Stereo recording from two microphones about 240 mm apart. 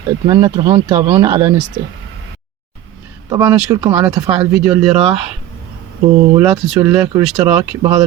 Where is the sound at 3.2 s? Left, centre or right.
Centre.